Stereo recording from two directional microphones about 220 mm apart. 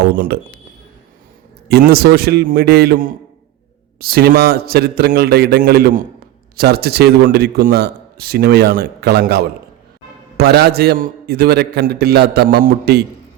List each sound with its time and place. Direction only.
0.3 s a man's voice: 45° right (ahead or behind)
1.9 s a man's voice: 45° right (ahead or behind)